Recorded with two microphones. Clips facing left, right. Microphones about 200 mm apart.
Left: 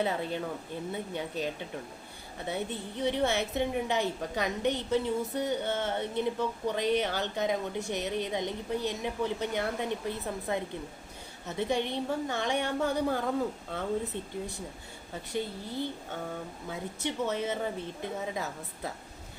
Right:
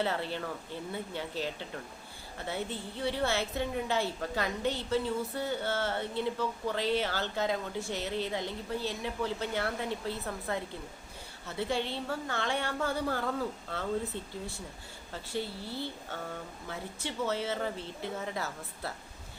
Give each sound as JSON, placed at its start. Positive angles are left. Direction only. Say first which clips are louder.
{"t": 0.0, "sound": "a woman's voice", "louder": "left 2 dB", "side_deg": 15}
{"t": 15.1, "sound": "a woman's voice", "louder": "left 2 dB", "side_deg": 15}